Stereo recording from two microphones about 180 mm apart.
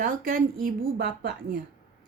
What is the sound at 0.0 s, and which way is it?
A woman's voice, 50° right (ahead or behind).